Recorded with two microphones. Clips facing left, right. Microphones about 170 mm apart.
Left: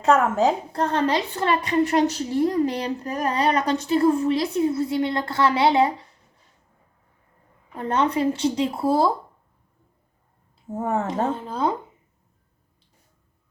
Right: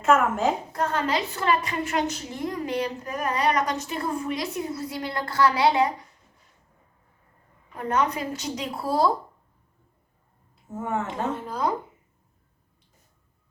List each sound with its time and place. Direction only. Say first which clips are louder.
0.0 s a woman's voice: left 3 dB; 35° left (ahead or behind)
7.8 s speech: left 4 dB; 30° left (ahead or behind)
10.8 s a woman's voice: left 5 dB; 35° left (ahead or behind)